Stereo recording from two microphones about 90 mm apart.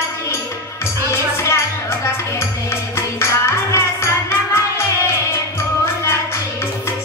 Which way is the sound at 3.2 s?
30° left (ahead or behind).